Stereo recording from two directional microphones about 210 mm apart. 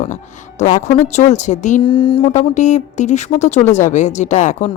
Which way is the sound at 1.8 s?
25° left (ahead or behind).